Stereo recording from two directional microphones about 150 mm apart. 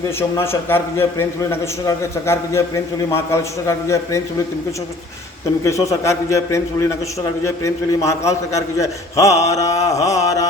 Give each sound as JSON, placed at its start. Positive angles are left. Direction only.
{"t": 0.2, "sound": "a man's voice", "side_deg": 15}
{"t": 5.6, "sound": "a man's voice", "side_deg": 20}